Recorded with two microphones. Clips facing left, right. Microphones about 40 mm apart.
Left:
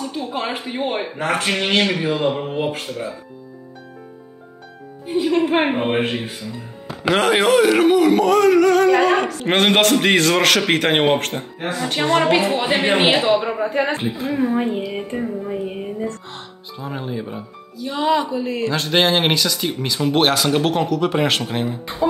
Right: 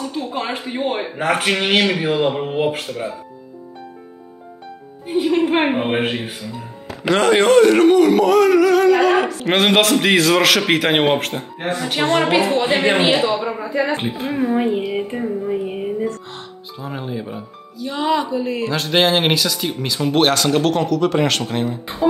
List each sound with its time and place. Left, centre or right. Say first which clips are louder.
0.0 s speech: right 1 dB; centre
5.0 s speech: right 1 dB; centre
6.0 s speech: right 1 dB; centre
7.1 s speech: right 2 dB; centre
13.6 s speech: left 1 dB; left
13.9 s a woman's voice: right 1 dB; right
14.3 s speech: right 2 dB; centre